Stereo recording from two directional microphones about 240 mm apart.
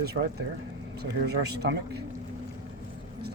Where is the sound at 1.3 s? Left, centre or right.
Right.